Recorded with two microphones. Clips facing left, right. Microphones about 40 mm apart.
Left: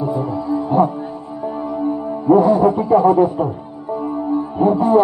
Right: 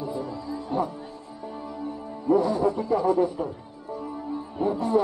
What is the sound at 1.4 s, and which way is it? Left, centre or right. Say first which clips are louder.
A man's voice: left 13 dB; left.